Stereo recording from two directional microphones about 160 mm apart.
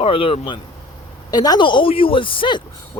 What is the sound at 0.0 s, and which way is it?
A man's voice, 35° left (ahead or behind).